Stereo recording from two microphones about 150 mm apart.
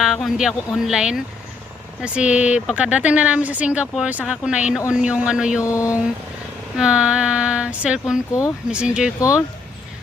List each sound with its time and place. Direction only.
0.0 s speech: centre (ahead or behind)
5.6 s speech: 20° left (ahead or behind)
6.7 s speech: 5° right (ahead or behind)